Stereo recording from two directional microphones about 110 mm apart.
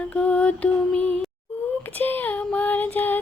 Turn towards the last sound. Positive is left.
turn(degrees=15)  # may be behind; listen again after turning